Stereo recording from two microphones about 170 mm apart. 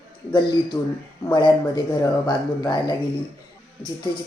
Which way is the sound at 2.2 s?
25° left (ahead or behind).